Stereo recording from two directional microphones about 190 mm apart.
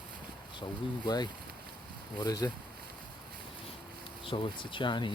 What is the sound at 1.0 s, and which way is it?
Speech, 20° left (ahead or behind).